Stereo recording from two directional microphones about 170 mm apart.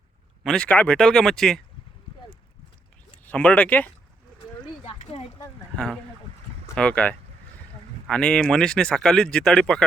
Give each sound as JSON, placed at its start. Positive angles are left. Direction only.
{"t": 0.4, "sound": "speech", "side_deg": 5}
{"t": 3.2, "sound": "speech", "side_deg": 5}
{"t": 4.9, "sound": "a sound", "side_deg": 35}
{"t": 5.7, "sound": "speech", "side_deg": 5}